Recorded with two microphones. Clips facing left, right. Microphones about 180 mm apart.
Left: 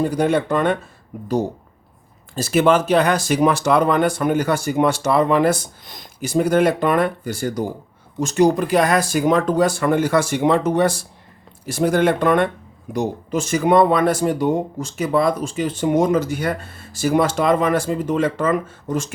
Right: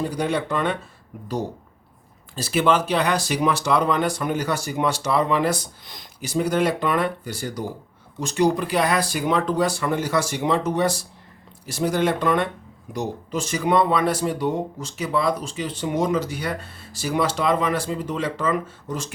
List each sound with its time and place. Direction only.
0.0 s speech: 50° left (ahead or behind)
2.3 s speech: 45° left (ahead or behind)